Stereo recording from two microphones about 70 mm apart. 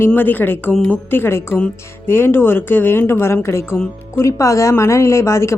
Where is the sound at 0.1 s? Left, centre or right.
Left.